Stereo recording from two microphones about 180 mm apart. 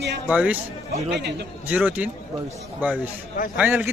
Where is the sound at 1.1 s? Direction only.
70° right (ahead or behind).